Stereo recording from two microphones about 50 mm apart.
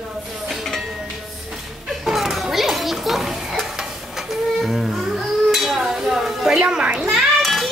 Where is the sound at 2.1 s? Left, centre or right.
Centre.